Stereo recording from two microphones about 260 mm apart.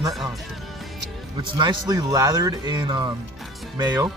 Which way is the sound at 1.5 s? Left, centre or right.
Centre.